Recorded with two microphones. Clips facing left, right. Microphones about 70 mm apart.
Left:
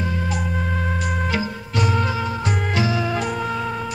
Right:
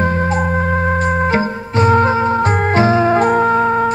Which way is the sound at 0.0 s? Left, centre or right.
Right.